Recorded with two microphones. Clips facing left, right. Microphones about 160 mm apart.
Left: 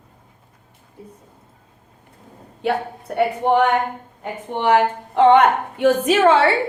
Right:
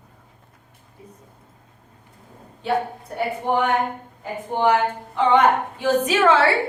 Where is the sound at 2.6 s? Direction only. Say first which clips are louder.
Left 1 dB; 70° left (ahead or behind); by 6.4 s 55° left (ahead or behind).